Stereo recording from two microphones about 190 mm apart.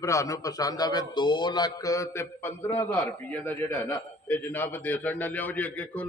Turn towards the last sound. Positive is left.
turn(degrees=10)  # may be behind; listen again after turning